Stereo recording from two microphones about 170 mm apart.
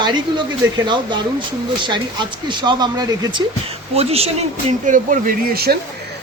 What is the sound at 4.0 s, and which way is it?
Speech, 35° right (ahead or behind).